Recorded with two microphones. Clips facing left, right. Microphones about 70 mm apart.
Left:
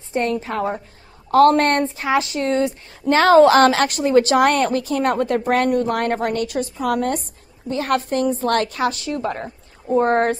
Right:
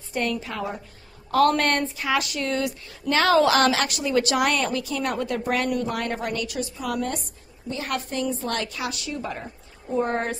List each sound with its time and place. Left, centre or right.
0.1 s a woman's voice: left